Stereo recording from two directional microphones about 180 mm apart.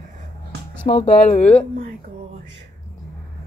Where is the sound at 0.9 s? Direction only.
35° left (ahead or behind).